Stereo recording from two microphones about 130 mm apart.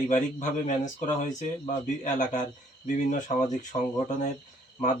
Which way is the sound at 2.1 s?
75° left (ahead or behind).